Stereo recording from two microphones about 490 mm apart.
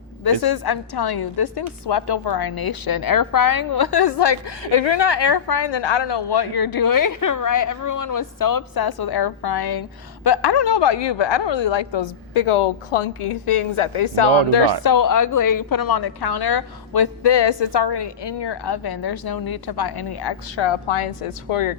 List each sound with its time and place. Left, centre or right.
0.3 s a woman's voice: left
14.8 s a woman's voice: left